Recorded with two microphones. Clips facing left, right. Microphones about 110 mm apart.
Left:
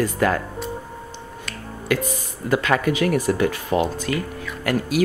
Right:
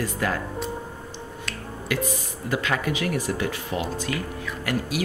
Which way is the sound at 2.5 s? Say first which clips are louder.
Left 6 dB; 55° left (ahead or behind).